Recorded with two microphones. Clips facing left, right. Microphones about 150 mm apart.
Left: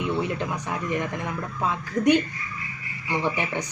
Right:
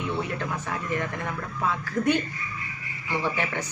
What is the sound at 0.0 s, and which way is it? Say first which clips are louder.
Speech: left 3 dB; 20° left (ahead or behind).